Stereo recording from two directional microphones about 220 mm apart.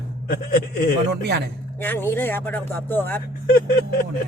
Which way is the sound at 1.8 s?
10° left (ahead or behind).